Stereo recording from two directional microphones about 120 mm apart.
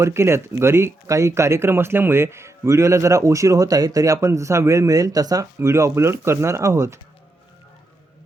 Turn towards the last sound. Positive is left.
turn(degrees=-25)  # may be behind; listen again after turning